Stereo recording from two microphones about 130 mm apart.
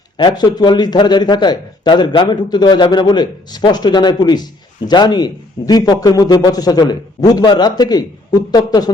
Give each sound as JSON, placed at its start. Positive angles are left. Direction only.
{"t": 0.2, "sound": "a man's voice", "side_deg": 35}